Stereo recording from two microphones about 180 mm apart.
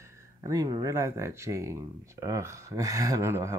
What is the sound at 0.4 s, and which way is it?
Speech, 20° right (ahead or behind).